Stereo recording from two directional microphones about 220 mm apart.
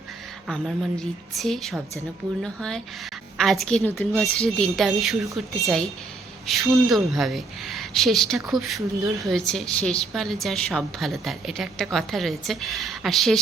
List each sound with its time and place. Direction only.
0.4 s a woman's voice: centre (ahead or behind)